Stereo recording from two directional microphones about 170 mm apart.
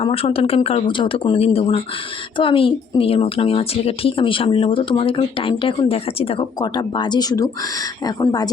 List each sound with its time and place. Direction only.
0.0 s speech: 35° left (ahead or behind)